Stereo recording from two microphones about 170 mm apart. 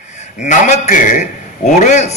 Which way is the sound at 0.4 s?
45° left (ahead or behind).